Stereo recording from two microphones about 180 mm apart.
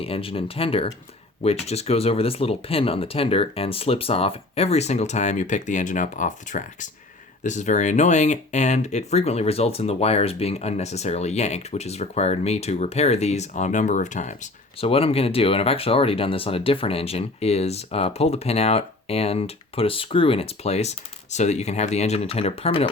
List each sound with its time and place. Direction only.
0.0 s speech: 30° left (ahead or behind)
14.8 s speech: 30° left (ahead or behind)